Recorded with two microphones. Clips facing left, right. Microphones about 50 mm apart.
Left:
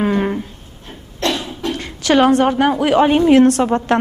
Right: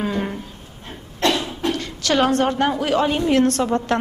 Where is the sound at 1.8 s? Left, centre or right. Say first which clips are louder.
Left 7 dB; centre.